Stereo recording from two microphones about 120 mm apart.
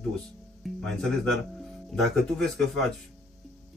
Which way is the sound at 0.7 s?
5° left (ahead or behind).